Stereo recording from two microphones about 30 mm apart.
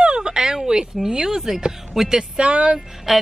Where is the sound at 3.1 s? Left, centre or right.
Centre.